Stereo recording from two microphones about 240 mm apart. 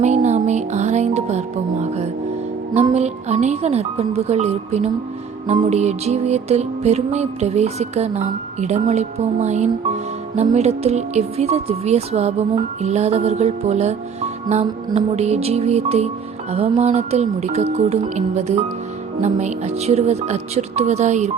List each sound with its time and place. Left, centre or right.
0.0 s music: right